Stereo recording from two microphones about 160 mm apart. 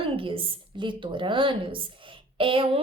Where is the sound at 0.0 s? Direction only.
35° right (ahead or behind).